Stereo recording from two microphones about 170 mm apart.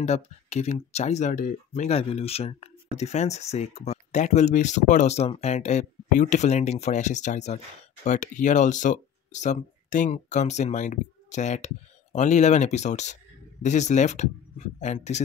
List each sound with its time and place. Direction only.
0.0 s speech: 40° left (ahead or behind)